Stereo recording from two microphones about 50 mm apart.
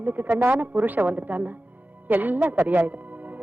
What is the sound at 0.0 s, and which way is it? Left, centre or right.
Speech, right.